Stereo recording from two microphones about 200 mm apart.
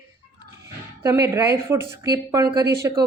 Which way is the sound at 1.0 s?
15° right (ahead or behind).